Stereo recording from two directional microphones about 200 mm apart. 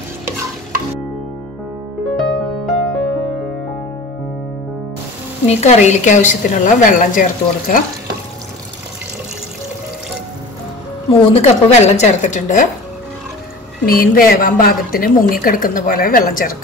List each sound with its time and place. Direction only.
2.0 s music: centre (ahead or behind)
5.5 s a woman's voice: 35° left (ahead or behind)
11.1 s a woman's voice: 30° left (ahead or behind)
13.8 s a woman's voice: 45° left (ahead or behind)